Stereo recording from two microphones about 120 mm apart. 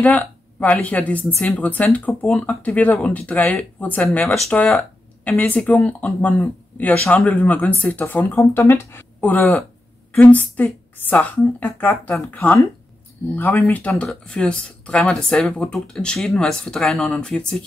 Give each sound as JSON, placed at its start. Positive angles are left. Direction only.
{"t": 0.0, "sound": "a woman's voice", "side_deg": 10}
{"t": 10.5, "sound": "a woman's voice", "side_deg": 15}